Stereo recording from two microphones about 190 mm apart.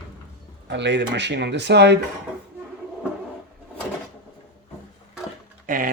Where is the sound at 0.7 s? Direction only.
65° right (ahead or behind).